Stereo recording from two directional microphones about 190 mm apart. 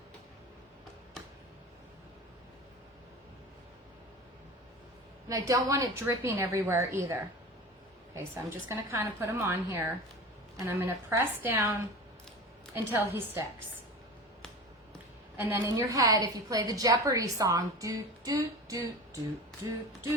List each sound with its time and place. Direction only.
5.3 s a woman's voice: 20° right (ahead or behind)
15.4 s a woman's voice: 10° right (ahead or behind)